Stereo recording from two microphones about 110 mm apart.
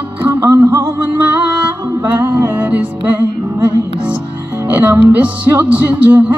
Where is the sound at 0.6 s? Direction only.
40° right (ahead or behind).